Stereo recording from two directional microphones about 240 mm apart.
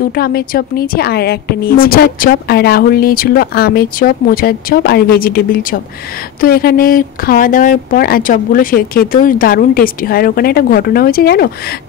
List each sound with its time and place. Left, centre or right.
0.1 s speech: left